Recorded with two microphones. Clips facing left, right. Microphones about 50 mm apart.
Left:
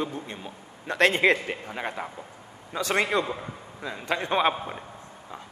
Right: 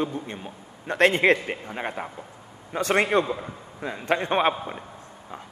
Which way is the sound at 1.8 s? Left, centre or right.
Centre.